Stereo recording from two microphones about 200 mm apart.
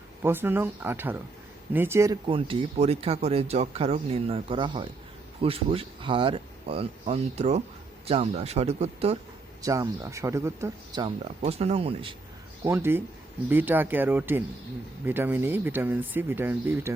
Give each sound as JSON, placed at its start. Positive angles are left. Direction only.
{"t": 0.2, "sound": "speech", "side_deg": -10}
{"t": 2.2, "sound": "speech", "side_deg": -25}
{"t": 9.6, "sound": "speech", "side_deg": -15}
{"t": 11.4, "sound": "speech", "side_deg": -30}
{"t": 12.6, "sound": "speech", "side_deg": -10}